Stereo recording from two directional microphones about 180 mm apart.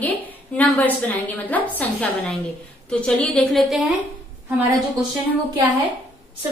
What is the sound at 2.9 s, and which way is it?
Speech, 5° left (ahead or behind).